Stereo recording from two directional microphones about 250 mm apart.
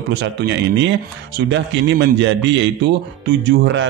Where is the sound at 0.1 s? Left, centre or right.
Right.